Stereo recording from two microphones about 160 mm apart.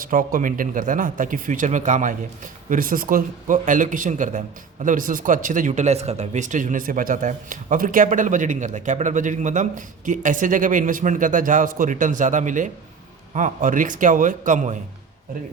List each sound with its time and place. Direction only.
0.0 s a man's voice: 60° right (ahead or behind)